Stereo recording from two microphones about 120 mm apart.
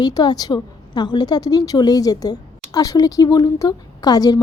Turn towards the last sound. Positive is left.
turn(degrees=35)  # may be behind; listen again after turning